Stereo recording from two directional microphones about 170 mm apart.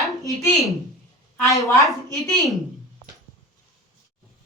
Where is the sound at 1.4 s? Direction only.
20° left (ahead or behind).